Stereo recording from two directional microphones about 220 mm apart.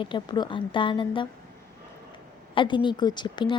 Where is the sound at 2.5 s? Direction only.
20° left (ahead or behind).